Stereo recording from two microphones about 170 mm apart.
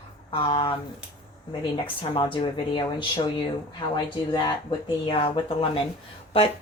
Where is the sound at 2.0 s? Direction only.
30° left (ahead or behind).